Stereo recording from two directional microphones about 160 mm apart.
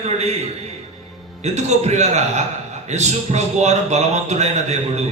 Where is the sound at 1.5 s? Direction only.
45° right (ahead or behind).